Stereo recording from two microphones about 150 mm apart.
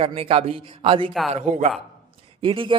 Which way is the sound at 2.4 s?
35° right (ahead or behind).